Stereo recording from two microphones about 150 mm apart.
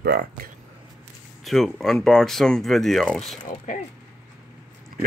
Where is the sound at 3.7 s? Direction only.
60° left (ahead or behind).